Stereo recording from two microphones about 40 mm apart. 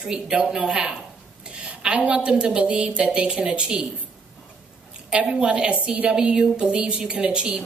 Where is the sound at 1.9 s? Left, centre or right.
Right.